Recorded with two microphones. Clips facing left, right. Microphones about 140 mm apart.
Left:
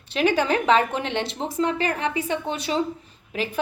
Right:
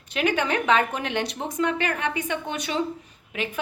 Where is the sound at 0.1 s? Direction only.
30° left (ahead or behind).